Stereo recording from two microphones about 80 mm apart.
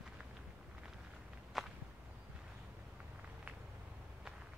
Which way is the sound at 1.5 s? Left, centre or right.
Centre.